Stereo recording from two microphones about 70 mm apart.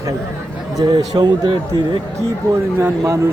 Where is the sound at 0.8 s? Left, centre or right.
Right.